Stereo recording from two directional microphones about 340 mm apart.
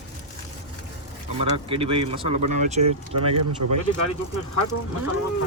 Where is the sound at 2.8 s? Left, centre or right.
Right.